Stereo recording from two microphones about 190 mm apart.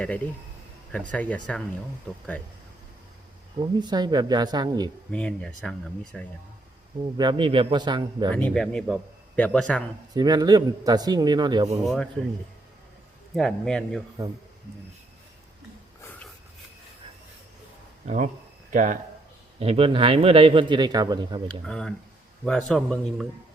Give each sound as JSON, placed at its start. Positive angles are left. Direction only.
{"t": 1.1, "sound": "speech", "side_deg": 5}
{"t": 3.6, "sound": "a man's voice", "side_deg": -20}
{"t": 5.1, "sound": "a man's voice", "side_deg": 5}
{"t": 7.0, "sound": "a man's voice", "side_deg": -25}
{"t": 8.3, "sound": "a man's voice", "side_deg": 5}
{"t": 10.2, "sound": "a man's voice", "side_deg": -20}
{"t": 13.3, "sound": "a man's voice", "side_deg": 5}
{"t": 18.0, "sound": "speech", "side_deg": -40}
{"t": 19.5, "sound": "a man's voice", "side_deg": -30}
{"t": 21.7, "sound": "a man's voice", "side_deg": 5}